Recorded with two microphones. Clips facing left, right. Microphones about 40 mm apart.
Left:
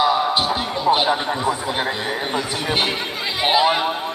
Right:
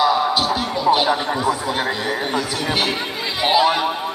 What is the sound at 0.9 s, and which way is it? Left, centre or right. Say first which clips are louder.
Speech: right 1 dB; centre.